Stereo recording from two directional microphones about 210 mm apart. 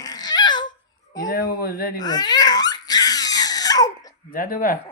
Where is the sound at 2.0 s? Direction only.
20° left (ahead or behind).